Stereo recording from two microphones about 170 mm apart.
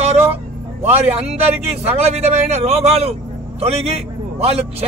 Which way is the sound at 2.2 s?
40° right (ahead or behind).